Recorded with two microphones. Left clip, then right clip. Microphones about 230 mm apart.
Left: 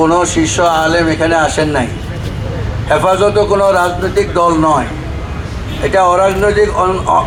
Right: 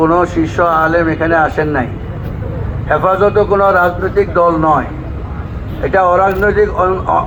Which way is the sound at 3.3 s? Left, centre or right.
Left.